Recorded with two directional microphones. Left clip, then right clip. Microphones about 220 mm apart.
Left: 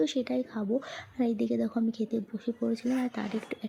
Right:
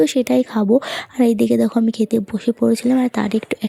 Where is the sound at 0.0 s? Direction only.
45° right (ahead or behind).